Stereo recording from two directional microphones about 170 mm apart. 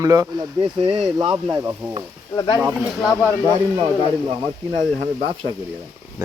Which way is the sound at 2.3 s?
25° left (ahead or behind).